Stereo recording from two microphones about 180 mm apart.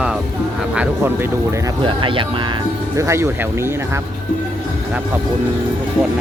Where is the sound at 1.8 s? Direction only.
30° right (ahead or behind).